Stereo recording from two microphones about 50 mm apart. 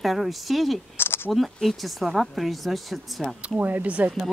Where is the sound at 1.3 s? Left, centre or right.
Centre.